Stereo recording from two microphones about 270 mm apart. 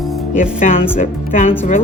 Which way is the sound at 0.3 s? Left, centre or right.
Left.